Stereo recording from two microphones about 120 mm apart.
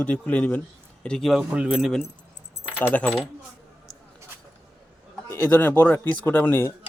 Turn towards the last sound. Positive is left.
turn(degrees=20)  # may be behind; listen again after turning